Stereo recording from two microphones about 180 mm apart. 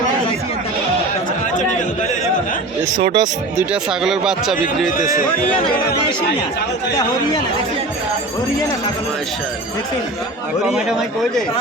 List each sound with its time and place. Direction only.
3.0 s speech: 25° right (ahead or behind)
3.6 s speech: 5° right (ahead or behind)
10.7 s speech: centre (ahead or behind)